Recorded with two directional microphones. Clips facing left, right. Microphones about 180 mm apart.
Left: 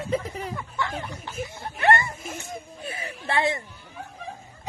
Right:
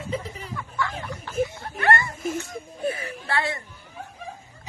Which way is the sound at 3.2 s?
20° left (ahead or behind).